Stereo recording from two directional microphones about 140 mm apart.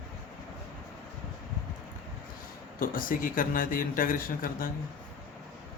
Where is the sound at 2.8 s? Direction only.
85° left.